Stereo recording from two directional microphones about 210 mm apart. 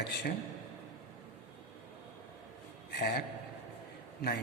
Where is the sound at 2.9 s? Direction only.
50° left (ahead or behind).